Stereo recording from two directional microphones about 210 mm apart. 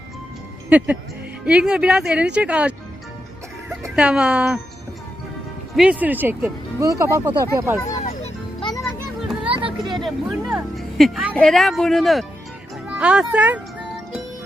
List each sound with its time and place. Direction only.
0.7 s speech: 5° right (ahead or behind)
3.9 s speech: 5° right (ahead or behind)
5.7 s speech: 5° right (ahead or behind)
8.0 s music: 30° left (ahead or behind)
9.5 s a sound: 25° right (ahead or behind)
9.9 s speech: centre (ahead or behind)